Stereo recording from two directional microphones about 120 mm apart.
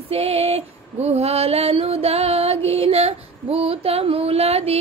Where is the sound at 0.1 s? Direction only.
55° right (ahead or behind).